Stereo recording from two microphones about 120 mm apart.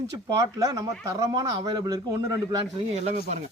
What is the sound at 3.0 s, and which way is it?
Speech, 70° right (ahead or behind).